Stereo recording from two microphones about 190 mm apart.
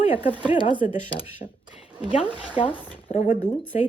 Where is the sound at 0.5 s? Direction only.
25° left (ahead or behind).